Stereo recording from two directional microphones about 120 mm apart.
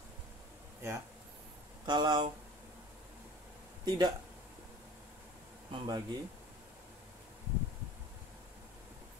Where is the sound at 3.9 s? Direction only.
35° right (ahead or behind).